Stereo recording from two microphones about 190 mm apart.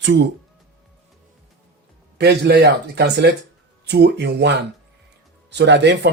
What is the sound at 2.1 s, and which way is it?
Speech, 60° right (ahead or behind).